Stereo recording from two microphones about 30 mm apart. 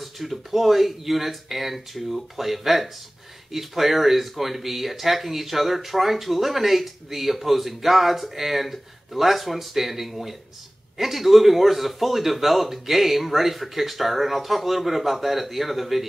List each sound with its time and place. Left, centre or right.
0.0 s speech: centre